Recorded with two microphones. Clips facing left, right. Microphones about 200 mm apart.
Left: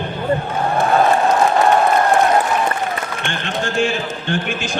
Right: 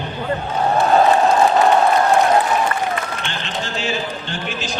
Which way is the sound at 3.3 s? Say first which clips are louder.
Left 4 dB; 50° left (ahead or behind).